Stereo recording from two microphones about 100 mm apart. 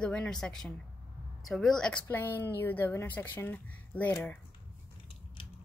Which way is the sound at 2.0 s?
20° left (ahead or behind).